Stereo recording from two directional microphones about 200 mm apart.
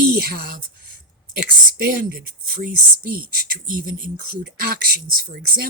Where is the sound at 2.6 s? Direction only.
45° right (ahead or behind).